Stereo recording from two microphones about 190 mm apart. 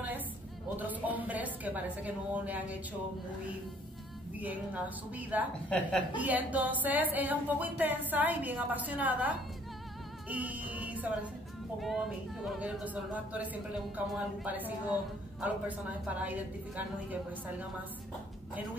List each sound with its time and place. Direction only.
0.7 s speech: 10° right (ahead or behind)
4.4 s speech: 10° right (ahead or behind)
5.7 s speech: 5° left (ahead or behind)
6.1 s speech: 10° right (ahead or behind)
10.3 s music: 10° right (ahead or behind)
11.8 s speech: centre (ahead or behind)
16.1 s speech: 10° right (ahead or behind)